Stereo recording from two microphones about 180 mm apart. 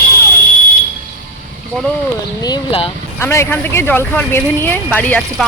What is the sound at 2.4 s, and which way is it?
Speech, 25° left (ahead or behind).